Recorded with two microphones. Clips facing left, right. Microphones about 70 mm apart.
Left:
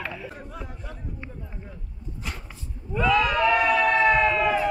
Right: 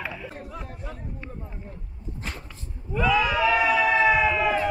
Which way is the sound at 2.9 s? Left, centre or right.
Centre.